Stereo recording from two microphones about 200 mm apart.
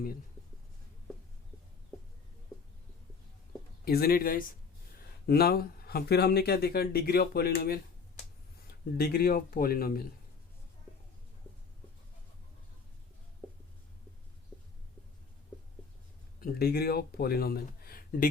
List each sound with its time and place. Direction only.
3.8 s speech: 50° left (ahead or behind)
9.0 s speech: 50° left (ahead or behind)
16.4 s speech: 50° left (ahead or behind)